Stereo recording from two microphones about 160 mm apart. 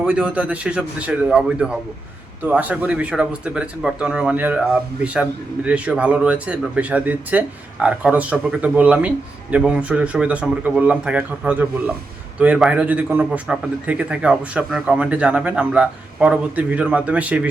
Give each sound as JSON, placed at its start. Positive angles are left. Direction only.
{"t": 0.0, "sound": "speech", "side_deg": -5}